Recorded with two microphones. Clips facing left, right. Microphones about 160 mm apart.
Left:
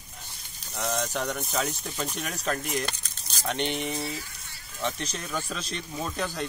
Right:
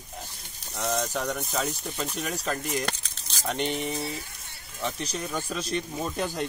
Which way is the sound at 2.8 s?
75° right (ahead or behind).